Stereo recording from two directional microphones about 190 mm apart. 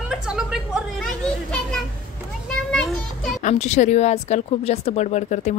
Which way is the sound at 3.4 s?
40° left (ahead or behind).